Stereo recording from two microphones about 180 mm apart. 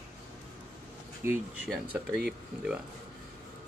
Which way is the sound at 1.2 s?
15° right (ahead or behind).